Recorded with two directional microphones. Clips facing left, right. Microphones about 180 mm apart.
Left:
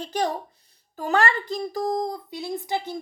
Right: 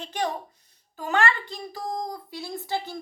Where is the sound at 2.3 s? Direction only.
20° left (ahead or behind).